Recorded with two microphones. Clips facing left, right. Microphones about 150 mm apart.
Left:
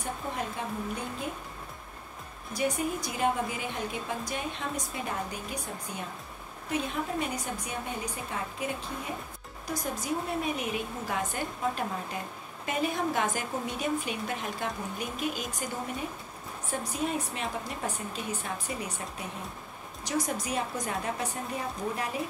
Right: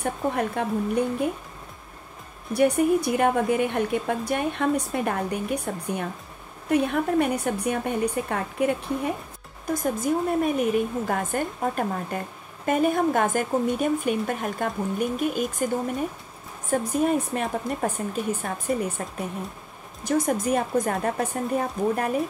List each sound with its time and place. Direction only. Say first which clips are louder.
0.0 s a woman's voice: right 9 dB; 60° right (ahead or behind)
2.5 s a woman's voice: right 10 dB; 60° right (ahead or behind)